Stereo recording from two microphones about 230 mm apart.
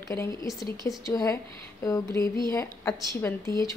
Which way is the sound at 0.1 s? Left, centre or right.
Centre.